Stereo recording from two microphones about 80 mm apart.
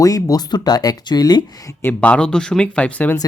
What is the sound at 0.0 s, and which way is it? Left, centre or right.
Speech, left.